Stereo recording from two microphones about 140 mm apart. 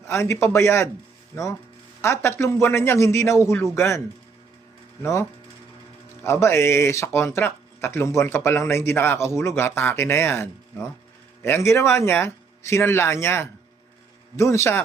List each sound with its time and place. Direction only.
0.1 s speech: 20° left (ahead or behind)
2.0 s speech: 20° left (ahead or behind)
6.2 s speech: 20° left (ahead or behind)